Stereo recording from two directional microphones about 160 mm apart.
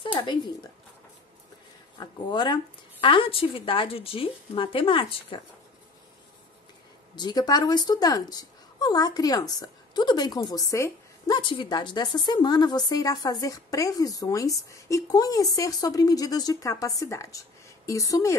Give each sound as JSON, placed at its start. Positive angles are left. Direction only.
{"t": 2.0, "sound": "speech", "side_deg": 30}
{"t": 7.2, "sound": "speech", "side_deg": 25}